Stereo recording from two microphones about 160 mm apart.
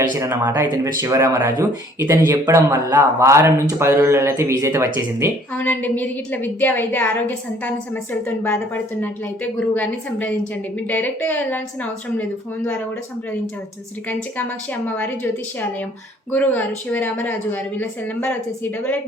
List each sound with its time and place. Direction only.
0.0 s speech: 20° right (ahead or behind)
5.5 s a woman's voice: 10° left (ahead or behind)
16.3 s a woman's voice: 10° left (ahead or behind)